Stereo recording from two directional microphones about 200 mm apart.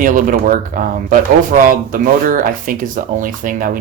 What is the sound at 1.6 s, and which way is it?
Speech, 45° right (ahead or behind).